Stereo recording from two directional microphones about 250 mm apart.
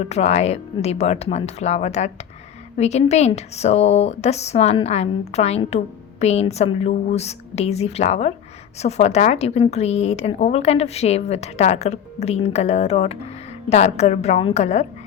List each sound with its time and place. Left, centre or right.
0.1 s a woman's voice: left